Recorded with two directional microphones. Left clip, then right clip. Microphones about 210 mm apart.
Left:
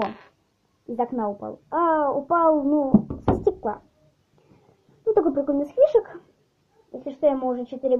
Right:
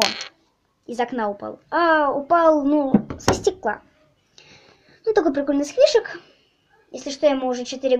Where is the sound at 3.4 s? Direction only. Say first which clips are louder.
Right 2 dB; 25° right (ahead or behind).